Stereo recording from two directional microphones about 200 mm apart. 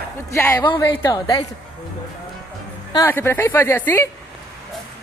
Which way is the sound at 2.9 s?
15° left (ahead or behind).